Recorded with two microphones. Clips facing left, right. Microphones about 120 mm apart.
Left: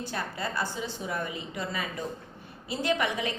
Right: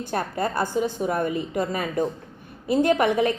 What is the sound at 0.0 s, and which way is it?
A woman's voice, 50° right (ahead or behind).